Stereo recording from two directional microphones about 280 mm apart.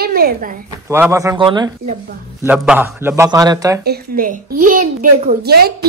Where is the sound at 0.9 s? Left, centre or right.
Centre.